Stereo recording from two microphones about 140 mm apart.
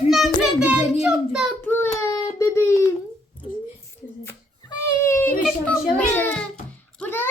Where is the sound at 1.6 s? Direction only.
15° left (ahead or behind).